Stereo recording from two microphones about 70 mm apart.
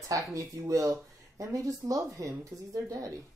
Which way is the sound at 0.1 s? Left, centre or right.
Right.